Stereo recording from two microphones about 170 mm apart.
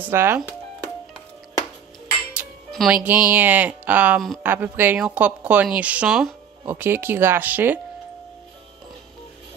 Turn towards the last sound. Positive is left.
turn(degrees=-10)  # may be behind; listen again after turning